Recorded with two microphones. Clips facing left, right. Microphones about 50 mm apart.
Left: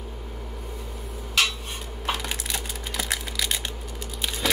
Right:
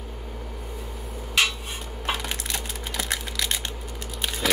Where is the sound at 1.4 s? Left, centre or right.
Centre.